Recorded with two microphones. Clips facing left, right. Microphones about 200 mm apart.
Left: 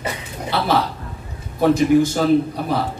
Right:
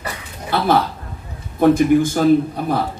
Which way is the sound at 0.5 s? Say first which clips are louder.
Right 2 dB; 50° right (ahead or behind).